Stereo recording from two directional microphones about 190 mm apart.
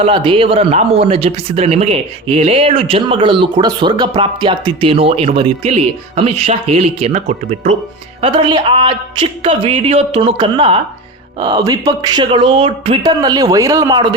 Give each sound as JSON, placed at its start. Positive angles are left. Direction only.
{"t": 0.0, "sound": "speech", "side_deg": -25}